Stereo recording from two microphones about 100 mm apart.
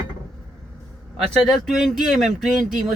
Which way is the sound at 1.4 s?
5° left (ahead or behind).